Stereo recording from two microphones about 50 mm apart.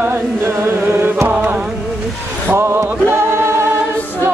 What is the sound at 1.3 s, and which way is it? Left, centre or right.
Music, right.